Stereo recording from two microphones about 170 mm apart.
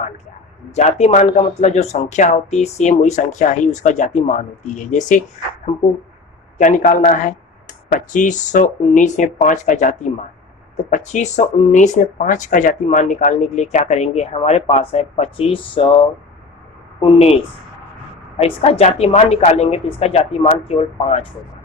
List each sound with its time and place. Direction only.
0.8 s speech: 40° left (ahead or behind)
5.7 s a woman's voice: 35° left (ahead or behind)
6.6 s a woman's voice: 50° left (ahead or behind)
18.3 s a woman's voice: 35° left (ahead or behind)